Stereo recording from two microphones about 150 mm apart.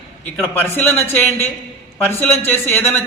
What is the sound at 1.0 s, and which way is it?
A man's voice, 15° left (ahead or behind).